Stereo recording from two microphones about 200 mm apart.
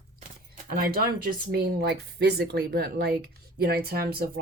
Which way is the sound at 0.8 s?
50° right (ahead or behind).